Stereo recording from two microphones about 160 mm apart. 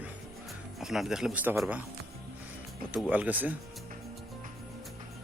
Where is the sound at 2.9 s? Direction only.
10° right (ahead or behind).